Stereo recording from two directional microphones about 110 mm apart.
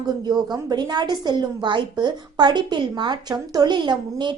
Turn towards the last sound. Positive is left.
turn(degrees=-45)  # may be behind; listen again after turning